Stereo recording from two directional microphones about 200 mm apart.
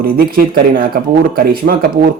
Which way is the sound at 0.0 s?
45° right (ahead or behind).